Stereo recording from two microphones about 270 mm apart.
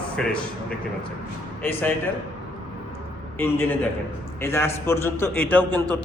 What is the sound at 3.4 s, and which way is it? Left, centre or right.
A man's voice, centre.